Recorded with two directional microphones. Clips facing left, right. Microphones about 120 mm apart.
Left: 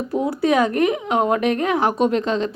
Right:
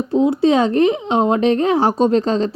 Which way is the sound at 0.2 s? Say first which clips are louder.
Right 4 dB; 25° right (ahead or behind).